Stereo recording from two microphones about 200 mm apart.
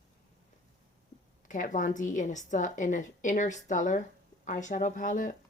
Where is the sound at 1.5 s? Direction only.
40° left (ahead or behind).